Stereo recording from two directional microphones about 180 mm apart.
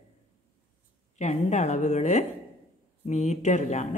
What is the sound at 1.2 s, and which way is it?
A woman's voice, 40° left (ahead or behind).